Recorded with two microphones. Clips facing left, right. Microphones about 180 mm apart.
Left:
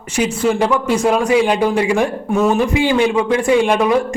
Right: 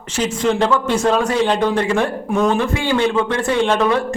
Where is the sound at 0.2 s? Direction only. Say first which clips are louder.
Left 2 dB; 10° left (ahead or behind).